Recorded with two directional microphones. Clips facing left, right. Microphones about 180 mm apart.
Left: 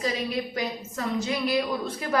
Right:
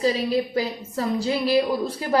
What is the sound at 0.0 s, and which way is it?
A woman's voice, 30° right (ahead or behind).